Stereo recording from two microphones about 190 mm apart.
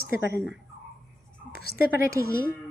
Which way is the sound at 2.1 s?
15° right (ahead or behind).